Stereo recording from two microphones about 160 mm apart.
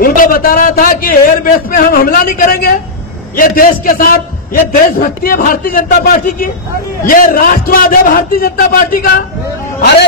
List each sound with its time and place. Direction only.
0.0 s a man's voice: 60° left (ahead or behind)
9.8 s speech: 90° left